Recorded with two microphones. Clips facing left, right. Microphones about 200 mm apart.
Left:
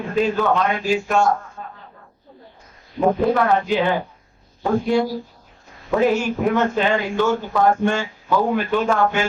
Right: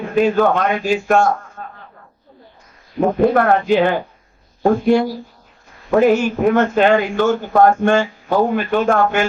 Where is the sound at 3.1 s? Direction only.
55° right (ahead or behind).